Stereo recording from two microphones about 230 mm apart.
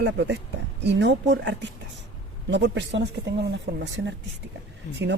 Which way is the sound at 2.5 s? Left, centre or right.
Right.